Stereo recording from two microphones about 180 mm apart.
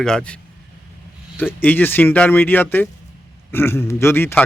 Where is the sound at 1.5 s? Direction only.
10° left (ahead or behind).